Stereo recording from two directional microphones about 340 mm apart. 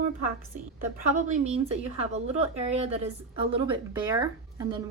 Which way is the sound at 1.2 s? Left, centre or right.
Right.